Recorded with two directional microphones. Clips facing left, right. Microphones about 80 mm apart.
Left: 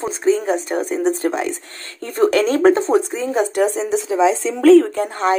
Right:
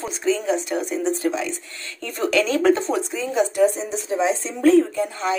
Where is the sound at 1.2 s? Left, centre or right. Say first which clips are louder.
Left 3 dB; left.